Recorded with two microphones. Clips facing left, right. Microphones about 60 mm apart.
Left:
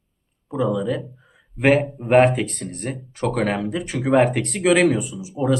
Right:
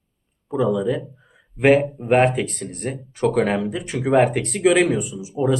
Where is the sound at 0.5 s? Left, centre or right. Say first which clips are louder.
Right 2 dB; centre.